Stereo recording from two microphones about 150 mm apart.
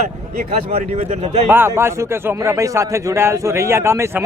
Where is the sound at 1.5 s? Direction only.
15° right (ahead or behind).